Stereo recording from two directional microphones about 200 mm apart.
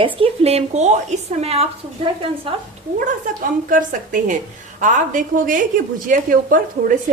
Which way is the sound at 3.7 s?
40° right (ahead or behind).